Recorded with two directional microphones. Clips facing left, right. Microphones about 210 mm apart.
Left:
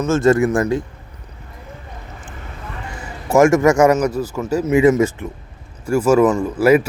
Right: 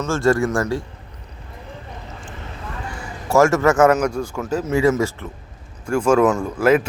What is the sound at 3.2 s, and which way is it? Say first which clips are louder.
Speech: left 3 dB; 15° left (ahead or behind).